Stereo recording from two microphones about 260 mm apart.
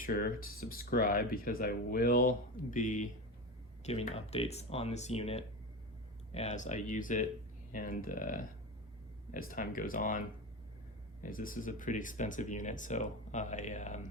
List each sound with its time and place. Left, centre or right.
0.0 s speech: left